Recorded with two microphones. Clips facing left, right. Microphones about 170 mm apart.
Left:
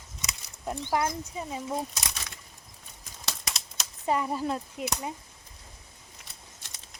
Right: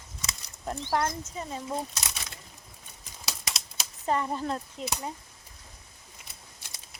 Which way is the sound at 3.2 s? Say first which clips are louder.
Even; 5° right (ahead or behind).